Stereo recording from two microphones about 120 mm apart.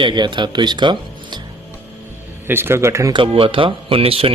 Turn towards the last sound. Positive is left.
turn(degrees=-50)  # may be behind; listen again after turning